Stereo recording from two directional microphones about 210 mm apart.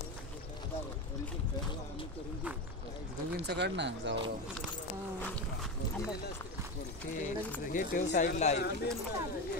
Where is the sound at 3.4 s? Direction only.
55° right (ahead or behind).